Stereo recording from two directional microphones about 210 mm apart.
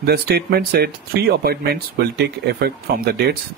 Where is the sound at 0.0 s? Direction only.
50° right (ahead or behind).